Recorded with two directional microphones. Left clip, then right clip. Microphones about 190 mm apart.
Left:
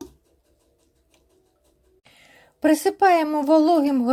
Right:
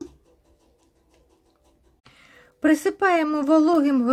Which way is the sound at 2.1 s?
5° left (ahead or behind).